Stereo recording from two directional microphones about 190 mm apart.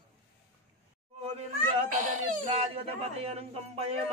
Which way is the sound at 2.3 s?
35° right (ahead or behind).